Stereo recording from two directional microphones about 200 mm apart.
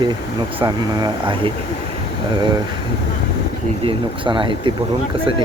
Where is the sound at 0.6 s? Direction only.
20° right (ahead or behind).